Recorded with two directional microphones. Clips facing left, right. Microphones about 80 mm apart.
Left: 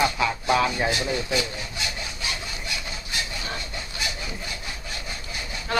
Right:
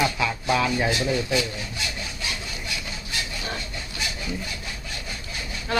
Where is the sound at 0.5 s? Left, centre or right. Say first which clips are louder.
Even; centre.